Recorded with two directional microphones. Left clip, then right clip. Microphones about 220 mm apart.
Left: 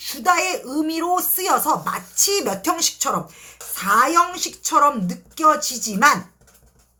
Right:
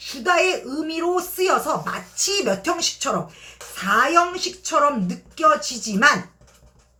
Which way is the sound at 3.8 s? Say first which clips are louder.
Left 1 dB; 40° left (ahead or behind).